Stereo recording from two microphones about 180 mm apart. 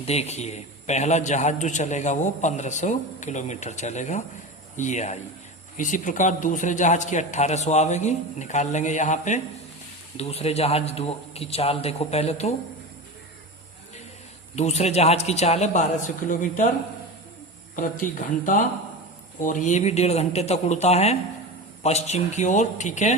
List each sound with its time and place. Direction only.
0.0 s a man's voice: 35° left (ahead or behind)
14.5 s a man's voice: 35° left (ahead or behind)
17.7 s a man's voice: 45° left (ahead or behind)